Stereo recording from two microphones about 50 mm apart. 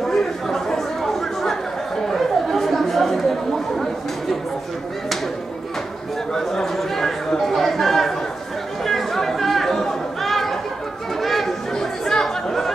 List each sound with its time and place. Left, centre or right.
0.1 s chatter: centre
6.3 s a sound: centre
8.8 s chatter: centre